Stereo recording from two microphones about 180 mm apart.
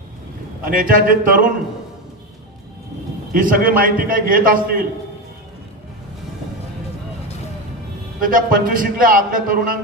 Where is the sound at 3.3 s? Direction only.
50° right (ahead or behind).